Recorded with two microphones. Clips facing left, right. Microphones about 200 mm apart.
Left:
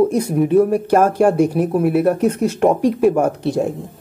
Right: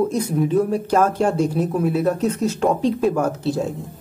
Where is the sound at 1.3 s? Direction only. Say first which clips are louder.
Left 4 dB; 10° left (ahead or behind).